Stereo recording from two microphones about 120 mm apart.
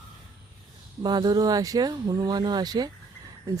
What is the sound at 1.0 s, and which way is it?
Speech, 35° right (ahead or behind).